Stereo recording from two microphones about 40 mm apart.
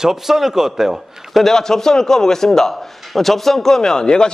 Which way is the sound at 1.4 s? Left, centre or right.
Centre.